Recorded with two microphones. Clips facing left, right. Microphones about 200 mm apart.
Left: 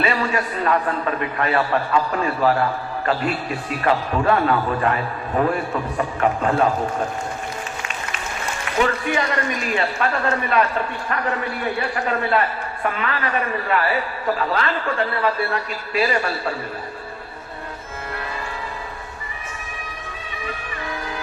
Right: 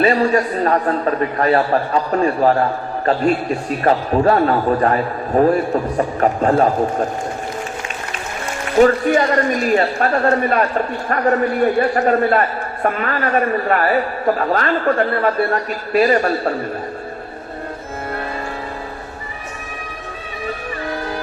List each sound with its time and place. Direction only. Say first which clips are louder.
0.0 s a man's voice: right 7 dB; 40° right (ahead or behind)
8.8 s a man's voice: right 9 dB; 45° right (ahead or behind)